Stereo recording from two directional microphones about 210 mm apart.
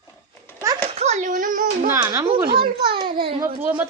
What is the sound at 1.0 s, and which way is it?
Child singing, 35° right (ahead or behind).